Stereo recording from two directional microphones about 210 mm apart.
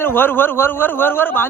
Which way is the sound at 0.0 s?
10° left (ahead or behind).